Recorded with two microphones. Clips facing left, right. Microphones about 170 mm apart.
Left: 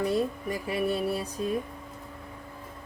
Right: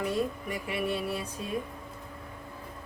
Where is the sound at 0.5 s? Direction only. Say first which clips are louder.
Left 4 dB; 40° left (ahead or behind).